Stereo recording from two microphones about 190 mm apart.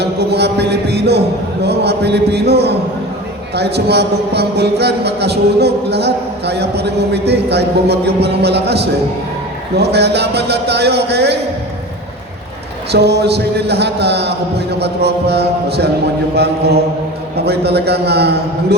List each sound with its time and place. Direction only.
0.0 s music: 60° right (ahead or behind)
1.6 s a man's voice: 60° right (ahead or behind)
12.9 s a man's voice: 60° right (ahead or behind)